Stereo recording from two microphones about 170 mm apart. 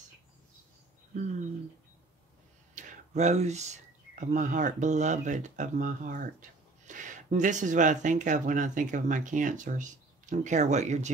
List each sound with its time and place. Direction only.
2.7 s speech: 45° right (ahead or behind)